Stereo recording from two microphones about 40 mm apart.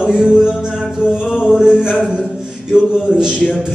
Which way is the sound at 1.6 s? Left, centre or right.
Centre.